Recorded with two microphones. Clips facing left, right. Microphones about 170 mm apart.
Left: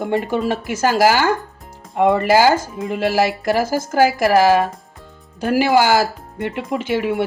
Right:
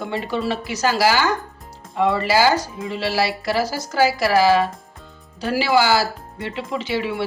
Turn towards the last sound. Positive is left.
turn(degrees=50)  # may be behind; listen again after turning